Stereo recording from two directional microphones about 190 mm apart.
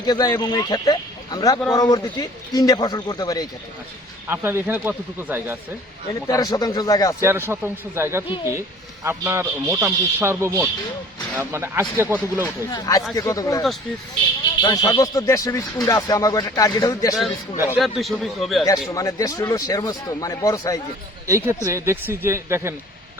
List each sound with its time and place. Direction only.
0.0 s speech: 20° left (ahead or behind)
4.3 s a man's voice: 10° right (ahead or behind)
6.2 s speech: 20° left (ahead or behind)
7.2 s a man's voice: 15° right (ahead or behind)
12.7 s speech: 20° left (ahead or behind)
14.6 s speech: 20° left (ahead or behind)
17.7 s speech: centre (ahead or behind)
18.9 s speech: 15° left (ahead or behind)
21.2 s a man's voice: 15° right (ahead or behind)